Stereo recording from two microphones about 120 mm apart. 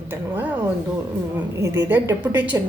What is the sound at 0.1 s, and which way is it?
Speech, 15° right (ahead or behind).